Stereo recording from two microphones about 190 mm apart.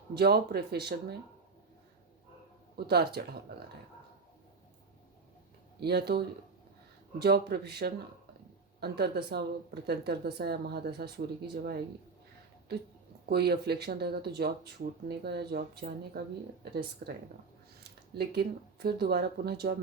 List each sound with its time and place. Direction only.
0.1 s speech: 55° right (ahead or behind)
2.7 s speech: 55° right (ahead or behind)
5.8 s speech: 60° right (ahead or behind)
13.2 s speech: 55° right (ahead or behind)
17.8 s speech: 60° right (ahead or behind)